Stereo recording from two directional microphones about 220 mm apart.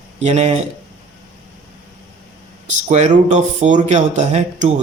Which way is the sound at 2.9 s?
30° right (ahead or behind).